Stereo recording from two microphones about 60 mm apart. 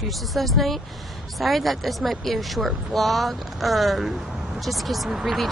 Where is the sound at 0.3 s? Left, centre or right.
Centre.